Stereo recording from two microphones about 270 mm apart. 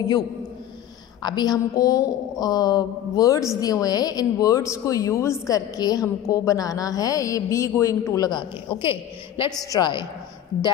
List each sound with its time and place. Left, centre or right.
1.2 s a woman's voice: centre